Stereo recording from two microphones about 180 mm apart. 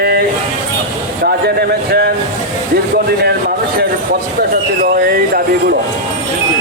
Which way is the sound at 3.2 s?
60° right (ahead or behind).